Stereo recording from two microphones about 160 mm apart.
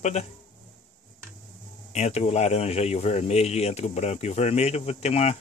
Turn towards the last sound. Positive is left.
turn(degrees=40)  # may be behind; listen again after turning